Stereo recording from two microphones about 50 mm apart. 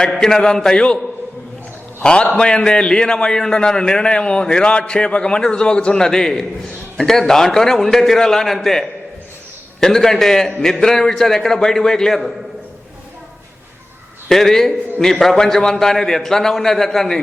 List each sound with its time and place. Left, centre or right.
0.1 s a man's voice: centre
2.0 s a man's voice: centre
14.3 s a man's voice: centre